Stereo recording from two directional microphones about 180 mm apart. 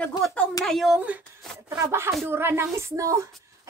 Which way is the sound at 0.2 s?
5° left (ahead or behind).